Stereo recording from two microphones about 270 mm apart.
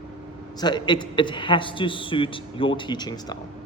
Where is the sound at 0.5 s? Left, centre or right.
Centre.